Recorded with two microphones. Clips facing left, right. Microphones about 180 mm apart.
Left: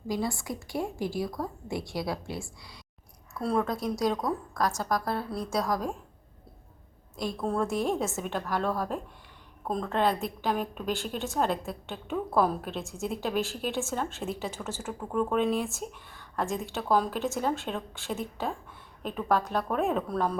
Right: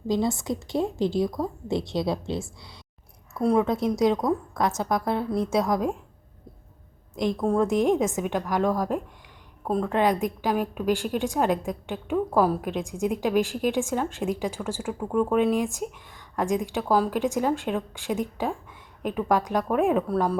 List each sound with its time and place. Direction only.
0.1 s a woman's voice: 20° right (ahead or behind)
7.2 s a woman's voice: 20° right (ahead or behind)